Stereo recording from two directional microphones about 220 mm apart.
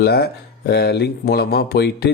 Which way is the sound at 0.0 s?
45° left (ahead or behind).